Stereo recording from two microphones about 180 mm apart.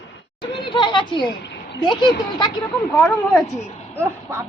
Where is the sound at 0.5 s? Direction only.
25° left (ahead or behind).